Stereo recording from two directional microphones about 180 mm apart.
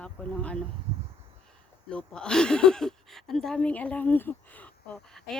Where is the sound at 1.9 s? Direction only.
5° left (ahead or behind).